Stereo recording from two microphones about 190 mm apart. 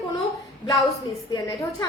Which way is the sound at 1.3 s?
20° left (ahead or behind).